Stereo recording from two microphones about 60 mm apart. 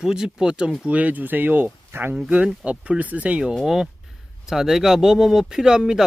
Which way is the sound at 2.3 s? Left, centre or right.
Centre.